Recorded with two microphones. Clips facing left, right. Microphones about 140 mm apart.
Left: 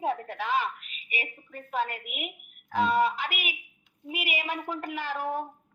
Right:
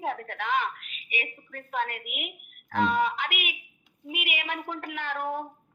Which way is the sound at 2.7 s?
5° left (ahead or behind).